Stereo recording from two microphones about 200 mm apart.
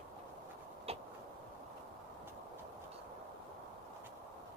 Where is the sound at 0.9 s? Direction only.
30° right (ahead or behind).